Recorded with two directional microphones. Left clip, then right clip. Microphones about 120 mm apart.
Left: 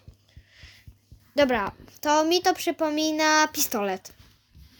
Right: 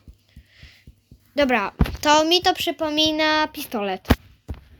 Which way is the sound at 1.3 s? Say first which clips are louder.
Right 3 dB; centre (ahead or behind).